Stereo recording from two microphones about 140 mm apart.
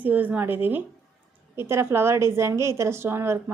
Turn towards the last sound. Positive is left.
turn(degrees=-20)  # may be behind; listen again after turning